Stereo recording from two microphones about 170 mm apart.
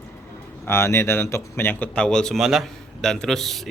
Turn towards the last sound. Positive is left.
turn(degrees=0)  # may be behind; listen again after turning